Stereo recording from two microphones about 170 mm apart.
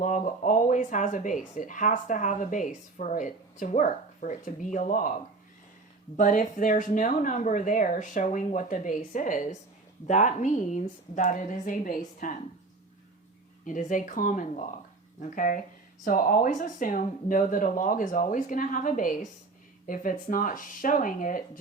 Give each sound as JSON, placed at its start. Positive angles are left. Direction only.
{"t": 0.0, "sound": "speech", "side_deg": 50}
{"t": 6.1, "sound": "speech", "side_deg": 50}
{"t": 13.7, "sound": "speech", "side_deg": 50}